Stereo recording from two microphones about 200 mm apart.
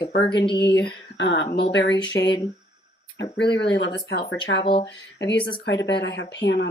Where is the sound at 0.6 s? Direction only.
55° left (ahead or behind).